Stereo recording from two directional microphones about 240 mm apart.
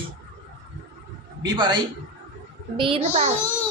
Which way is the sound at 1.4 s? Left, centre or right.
Centre.